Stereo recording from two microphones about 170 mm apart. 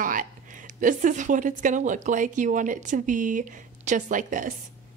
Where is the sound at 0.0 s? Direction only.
55° right (ahead or behind).